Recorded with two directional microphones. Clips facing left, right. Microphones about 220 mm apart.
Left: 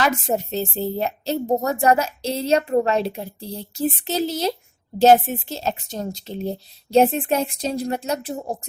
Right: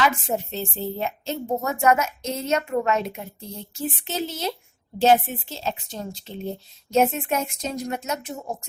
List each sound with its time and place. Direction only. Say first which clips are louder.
0.0 s a woman's voice: left 2 dB; 40° left (ahead or behind)